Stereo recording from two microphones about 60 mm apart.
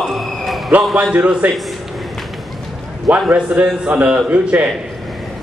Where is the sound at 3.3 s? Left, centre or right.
Right.